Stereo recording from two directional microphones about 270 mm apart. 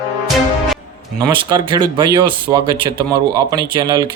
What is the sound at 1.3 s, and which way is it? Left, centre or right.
Speech, centre.